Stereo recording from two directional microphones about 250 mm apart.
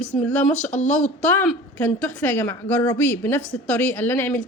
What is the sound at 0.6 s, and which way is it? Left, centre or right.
Speech, left.